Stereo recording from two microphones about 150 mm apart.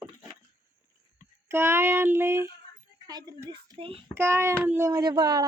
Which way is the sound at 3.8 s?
40° right (ahead or behind).